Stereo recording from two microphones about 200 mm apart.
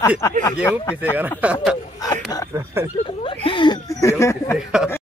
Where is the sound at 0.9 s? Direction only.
10° right (ahead or behind).